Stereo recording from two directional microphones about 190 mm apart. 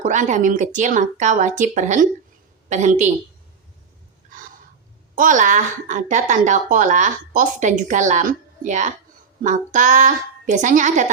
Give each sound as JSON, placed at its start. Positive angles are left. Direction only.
{"t": 0.0, "sound": "a woman's voice", "side_deg": -40}
{"t": 5.1, "sound": "speech", "side_deg": -45}